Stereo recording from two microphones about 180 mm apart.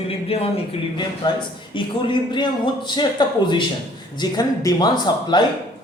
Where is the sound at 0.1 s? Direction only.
30° left (ahead or behind).